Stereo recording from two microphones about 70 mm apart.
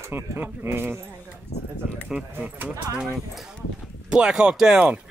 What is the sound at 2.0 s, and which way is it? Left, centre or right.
Speech, centre.